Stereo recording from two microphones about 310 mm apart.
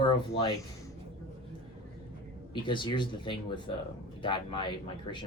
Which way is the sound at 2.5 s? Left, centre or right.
Centre.